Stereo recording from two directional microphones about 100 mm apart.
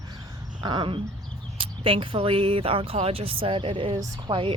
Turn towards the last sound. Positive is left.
turn(degrees=-65)  # may be behind; listen again after turning